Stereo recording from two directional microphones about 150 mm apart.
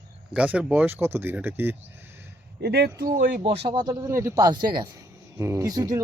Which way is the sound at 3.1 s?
70° right (ahead or behind).